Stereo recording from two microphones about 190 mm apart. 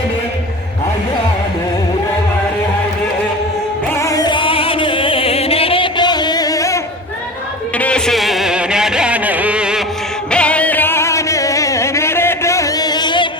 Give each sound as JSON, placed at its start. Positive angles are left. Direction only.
{"t": 3.9, "sound": "music", "side_deg": 15}
{"t": 7.8, "sound": "music", "side_deg": 5}
{"t": 10.3, "sound": "music", "side_deg": 5}